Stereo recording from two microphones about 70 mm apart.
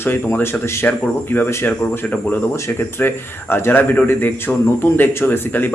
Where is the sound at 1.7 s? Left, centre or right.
Left.